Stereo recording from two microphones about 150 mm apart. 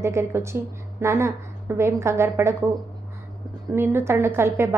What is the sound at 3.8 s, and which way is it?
Speech, 15° right (ahead or behind).